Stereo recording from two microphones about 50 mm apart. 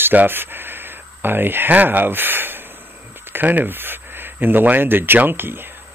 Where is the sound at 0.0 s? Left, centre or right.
Right.